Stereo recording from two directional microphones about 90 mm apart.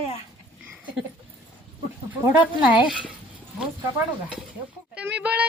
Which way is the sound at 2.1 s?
20° right (ahead or behind).